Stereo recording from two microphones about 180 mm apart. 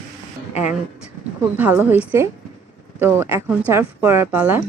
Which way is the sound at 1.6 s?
10° right (ahead or behind).